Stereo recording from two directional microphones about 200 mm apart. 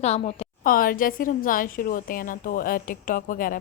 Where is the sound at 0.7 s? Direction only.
45° left (ahead or behind).